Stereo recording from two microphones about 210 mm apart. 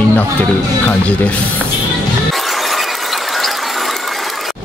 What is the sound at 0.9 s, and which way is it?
Speech, 5° left (ahead or behind).